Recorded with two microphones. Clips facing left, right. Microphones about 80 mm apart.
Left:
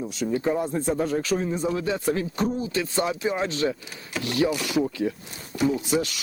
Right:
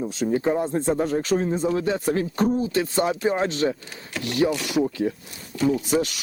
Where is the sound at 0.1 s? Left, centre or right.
Right.